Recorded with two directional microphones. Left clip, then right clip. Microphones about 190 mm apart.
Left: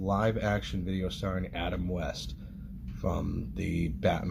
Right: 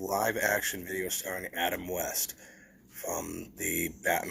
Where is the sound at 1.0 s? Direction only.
10° right (ahead or behind).